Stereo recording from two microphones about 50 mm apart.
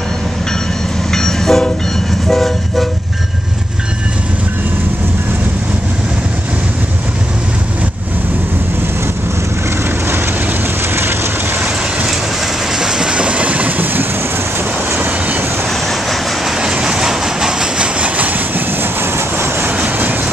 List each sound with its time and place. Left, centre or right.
1.1 s train: centre
2.2 s vehicle: centre
12.7 s train: centre; by 14.0 s right
15.0 s train: right
15.9 s vehicle: centre
16.5 s train: centre
17.9 s train: right
19.8 s vehicle: right